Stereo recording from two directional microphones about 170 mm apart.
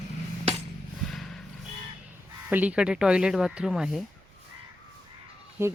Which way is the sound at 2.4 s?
10° right (ahead or behind).